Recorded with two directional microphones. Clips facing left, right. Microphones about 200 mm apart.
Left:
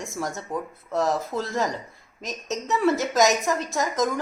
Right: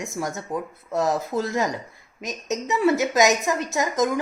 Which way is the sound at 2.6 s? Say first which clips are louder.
Right 1 dB; 5° right (ahead or behind).